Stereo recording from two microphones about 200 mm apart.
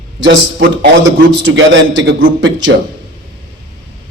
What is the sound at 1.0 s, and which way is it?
A man's voice, 70° right (ahead or behind).